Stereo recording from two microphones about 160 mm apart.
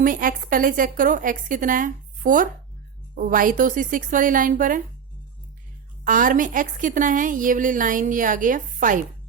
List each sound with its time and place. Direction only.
0.0 s a woman's voice: 60° right (ahead or behind)
6.1 s a woman's voice: 60° right (ahead or behind)